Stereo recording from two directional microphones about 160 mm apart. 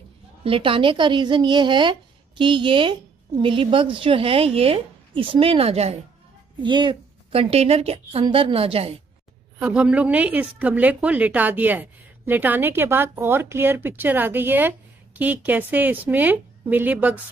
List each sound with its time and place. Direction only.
0.4 s a woman's voice: 35° right (ahead or behind)
6.6 s a woman's voice: 30° right (ahead or behind)
9.6 s a woman's voice: 10° right (ahead or behind)